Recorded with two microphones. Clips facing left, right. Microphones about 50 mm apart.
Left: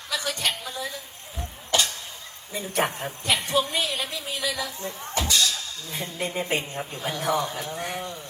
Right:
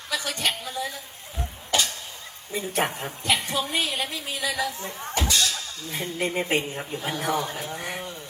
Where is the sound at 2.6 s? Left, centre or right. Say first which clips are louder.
Left 1 dB; right.